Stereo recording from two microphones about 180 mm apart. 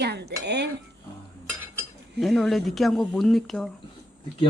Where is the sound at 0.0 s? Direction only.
65° right (ahead or behind).